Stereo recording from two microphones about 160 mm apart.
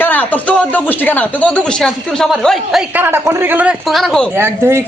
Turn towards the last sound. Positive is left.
turn(degrees=-15)  # may be behind; listen again after turning